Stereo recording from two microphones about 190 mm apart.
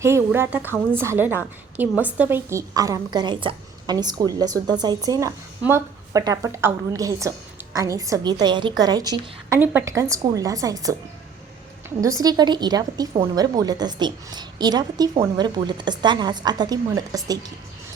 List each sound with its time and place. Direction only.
0.0 s a woman's voice: 15° right (ahead or behind)
11.9 s a woman's voice: 20° right (ahead or behind)